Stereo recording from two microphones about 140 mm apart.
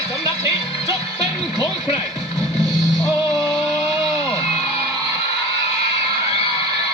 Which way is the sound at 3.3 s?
Centre (ahead or behind).